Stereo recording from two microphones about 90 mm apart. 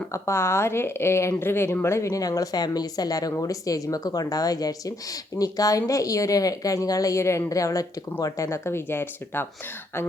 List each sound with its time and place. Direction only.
0.1 s speech: 30° left (ahead or behind)